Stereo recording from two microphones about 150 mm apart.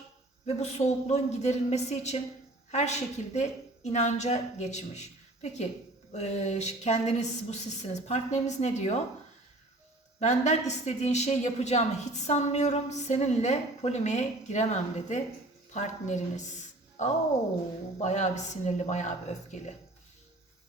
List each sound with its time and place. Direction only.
0.4 s a woman's voice: 45° left (ahead or behind)
10.2 s a woman's voice: 50° left (ahead or behind)